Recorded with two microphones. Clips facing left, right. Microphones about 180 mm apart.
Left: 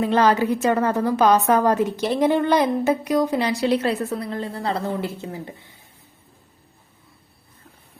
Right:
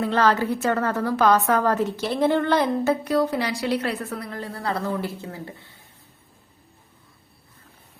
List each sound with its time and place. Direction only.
0.0 s a woman's voice: 15° left (ahead or behind)